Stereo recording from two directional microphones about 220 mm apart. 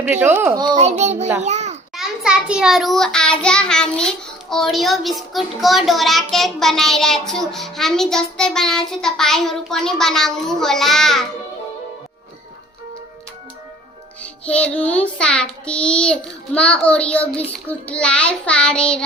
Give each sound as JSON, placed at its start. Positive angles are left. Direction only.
{"t": 0.0, "sound": "speech", "side_deg": -10}
{"t": 0.8, "sound": "child singing", "side_deg": -30}
{"t": 1.4, "sound": "a sound", "side_deg": -30}
{"t": 2.0, "sound": "a child's voice", "side_deg": 0}
{"t": 14.2, "sound": "a child's voice", "side_deg": 5}